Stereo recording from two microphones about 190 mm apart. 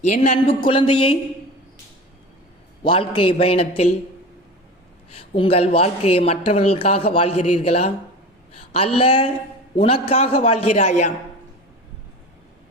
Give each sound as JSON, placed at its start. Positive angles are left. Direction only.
{"t": 0.0, "sound": "a woman's voice", "side_deg": 35}
{"t": 0.4, "sound": "a man's voice", "side_deg": 25}
{"t": 2.8, "sound": "a man's voice", "side_deg": 30}
{"t": 5.1, "sound": "a woman's voice", "side_deg": 30}